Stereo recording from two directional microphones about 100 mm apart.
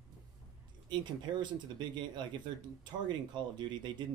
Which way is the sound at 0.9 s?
50° right (ahead or behind).